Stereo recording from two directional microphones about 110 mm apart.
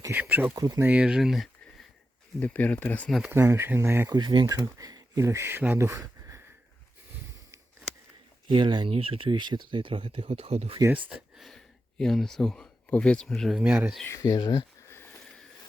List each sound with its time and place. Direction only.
0.1 s speech: 15° right (ahead or behind)
0.5 s speech: 35° right (ahead or behind)
0.8 s speech: 15° right (ahead or behind)
2.4 s speech: 15° left (ahead or behind)
3.2 s speech: 25° right (ahead or behind)
4.1 s speech: 45° right (ahead or behind); by 6.4 s 25° right (ahead or behind)
8.4 s speech: 45° right (ahead or behind); by 10.8 s 65° right (ahead or behind)
11.3 s a sound: 5° left (ahead or behind)
12.9 s speech: 10° left (ahead or behind)
13.6 s speech: 10° right (ahead or behind)
14.1 s speech: 35° left (ahead or behind)
14.8 s a sound: 25° left (ahead or behind)